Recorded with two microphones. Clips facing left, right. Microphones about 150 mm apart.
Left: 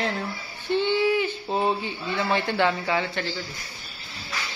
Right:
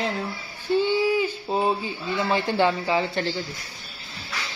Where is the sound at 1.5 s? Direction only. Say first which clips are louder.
Right 1 dB; 5° right (ahead or behind).